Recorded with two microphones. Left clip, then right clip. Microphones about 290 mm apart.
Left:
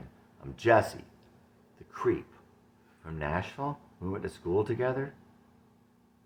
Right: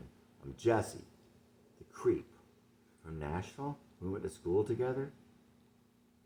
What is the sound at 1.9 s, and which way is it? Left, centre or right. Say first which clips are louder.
Speech: left 3 dB; centre.